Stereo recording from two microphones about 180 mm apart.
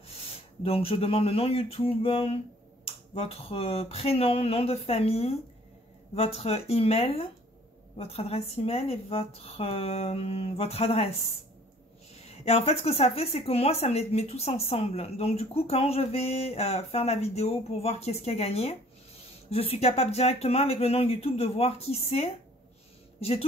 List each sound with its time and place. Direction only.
0.7 s a woman's voice: 30° left (ahead or behind)
12.3 s a woman's voice: 35° left (ahead or behind)